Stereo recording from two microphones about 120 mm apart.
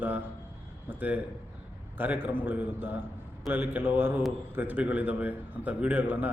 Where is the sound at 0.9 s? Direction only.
15° right (ahead or behind).